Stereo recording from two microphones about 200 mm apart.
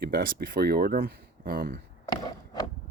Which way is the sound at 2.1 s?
20° left (ahead or behind).